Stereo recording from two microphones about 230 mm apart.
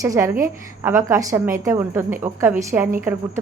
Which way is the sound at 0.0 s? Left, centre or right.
Centre.